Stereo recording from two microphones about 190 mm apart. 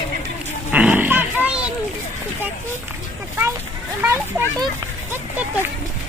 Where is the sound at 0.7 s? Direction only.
5° right (ahead or behind).